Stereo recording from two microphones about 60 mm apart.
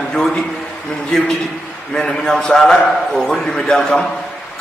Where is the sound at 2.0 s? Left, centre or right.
Centre.